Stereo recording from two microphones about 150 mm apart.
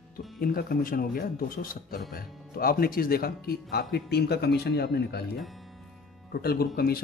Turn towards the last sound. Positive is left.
turn(degrees=90)